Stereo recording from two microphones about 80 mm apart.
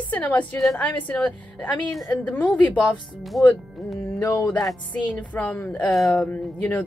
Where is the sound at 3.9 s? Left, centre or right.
Left.